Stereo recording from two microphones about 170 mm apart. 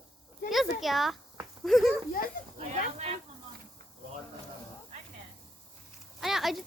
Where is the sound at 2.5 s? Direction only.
40° right (ahead or behind).